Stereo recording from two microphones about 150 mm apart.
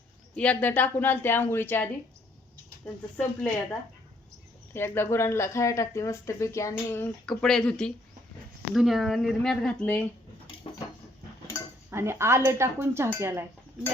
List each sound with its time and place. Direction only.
0.3 s a woman's voice: 10° left (ahead or behind)
7.3 s speech: 5° left (ahead or behind)
11.9 s speech: 15° right (ahead or behind)